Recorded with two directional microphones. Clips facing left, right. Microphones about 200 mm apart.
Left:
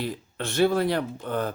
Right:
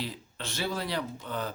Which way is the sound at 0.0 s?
50° left (ahead or behind).